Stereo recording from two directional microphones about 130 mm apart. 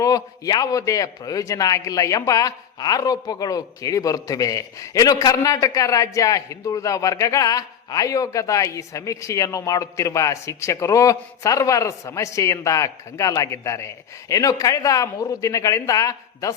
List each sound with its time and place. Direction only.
0.0 s a man's voice: 30° left (ahead or behind)